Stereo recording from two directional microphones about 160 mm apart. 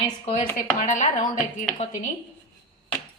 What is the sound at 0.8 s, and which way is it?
Speech, 50° left (ahead or behind).